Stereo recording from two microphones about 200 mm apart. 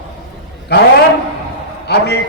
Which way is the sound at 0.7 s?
55° left (ahead or behind).